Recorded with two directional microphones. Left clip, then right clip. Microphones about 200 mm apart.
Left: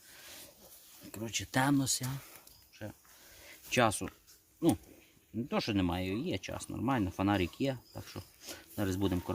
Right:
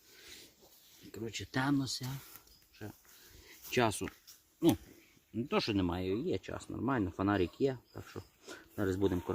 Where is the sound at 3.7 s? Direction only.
35° left (ahead or behind).